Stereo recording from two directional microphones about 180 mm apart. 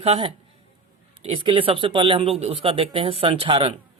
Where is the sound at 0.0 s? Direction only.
35° right (ahead or behind).